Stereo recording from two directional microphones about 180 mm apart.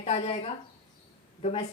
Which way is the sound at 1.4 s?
40° left (ahead or behind).